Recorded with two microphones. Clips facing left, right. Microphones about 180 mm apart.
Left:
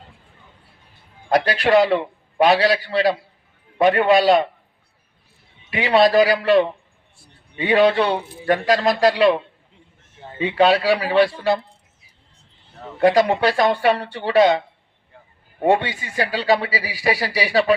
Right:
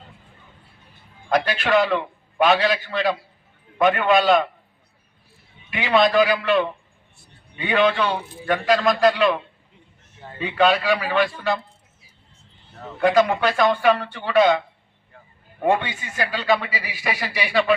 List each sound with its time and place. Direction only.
1.3 s a man's voice: 35° left (ahead or behind)
5.7 s a man's voice: 35° left (ahead or behind)
13.0 s a man's voice: 35° left (ahead or behind)